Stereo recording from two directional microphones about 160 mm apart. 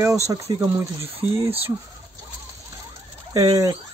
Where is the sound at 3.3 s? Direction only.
20° right (ahead or behind).